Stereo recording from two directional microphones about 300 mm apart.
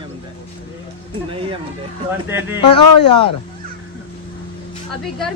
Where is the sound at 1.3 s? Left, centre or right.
Centre.